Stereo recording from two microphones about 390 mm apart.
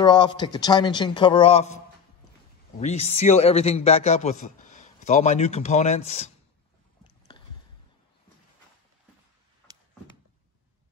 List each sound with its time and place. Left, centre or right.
0.0 s speech: centre
2.8 s speech: centre
7.3 s a sound: centre